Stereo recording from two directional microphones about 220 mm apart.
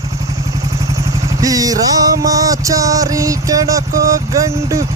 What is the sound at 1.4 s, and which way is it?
Music, 15° right (ahead or behind).